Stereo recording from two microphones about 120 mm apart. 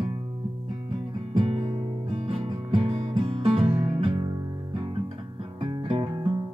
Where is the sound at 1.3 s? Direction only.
50° right (ahead or behind).